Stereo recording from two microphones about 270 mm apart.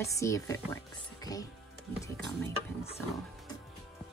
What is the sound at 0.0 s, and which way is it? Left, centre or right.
Speech, centre.